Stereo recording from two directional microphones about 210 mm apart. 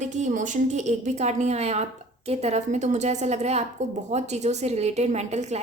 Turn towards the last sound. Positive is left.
turn(degrees=-30)  # may be behind; listen again after turning